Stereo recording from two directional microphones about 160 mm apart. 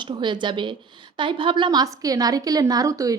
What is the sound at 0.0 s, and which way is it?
A woman's voice, 30° right (ahead or behind).